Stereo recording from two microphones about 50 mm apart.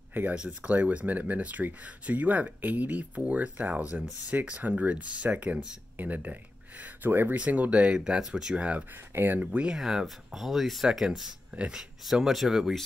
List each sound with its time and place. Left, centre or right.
0.3 s speech: right
7.3 s speech: right
8.2 s speech: centre
8.5 s speech: right
9.1 s speech: right
9.4 s speech: right
9.8 s speech: centre
11.5 s speech: right
12.1 s speech: centre